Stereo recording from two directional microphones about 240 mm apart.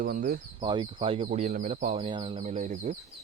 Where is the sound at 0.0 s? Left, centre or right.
Right.